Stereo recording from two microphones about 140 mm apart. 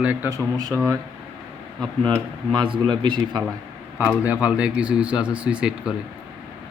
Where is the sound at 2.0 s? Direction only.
35° right (ahead or behind).